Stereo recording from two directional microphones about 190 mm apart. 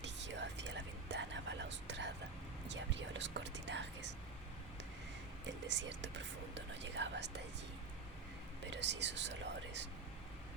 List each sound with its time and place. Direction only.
0.0 s whispering: 70° right (ahead or behind)
5.5 s whispering: 70° right (ahead or behind)
8.6 s speech: 70° right (ahead or behind)